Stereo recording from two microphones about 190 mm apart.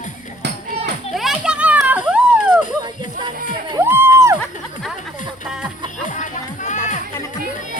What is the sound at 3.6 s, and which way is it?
Music, 15° right (ahead or behind).